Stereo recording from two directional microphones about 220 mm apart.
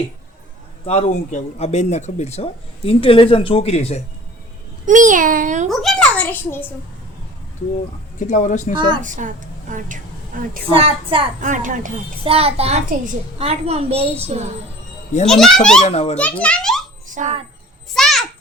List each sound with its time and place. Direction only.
0.9 s speech: 30° left (ahead or behind)
4.9 s a child's voice: 35° right (ahead or behind)
5.6 s speech: centre (ahead or behind)
8.2 s speech: 35° left (ahead or behind)
8.7 s a woman's voice: 20° right (ahead or behind)
9.0 s a woman's voice: 35° right (ahead or behind)
10.7 s a woman's voice: 25° right (ahead or behind)
11.3 s a child's voice: 35° right (ahead or behind)
15.3 s speech: centre (ahead or behind)
15.8 s speech: 30° left (ahead or behind)
16.1 s speech: 5° left (ahead or behind)
17.1 s speech: 35° right (ahead or behind)
17.9 s a sound: centre (ahead or behind)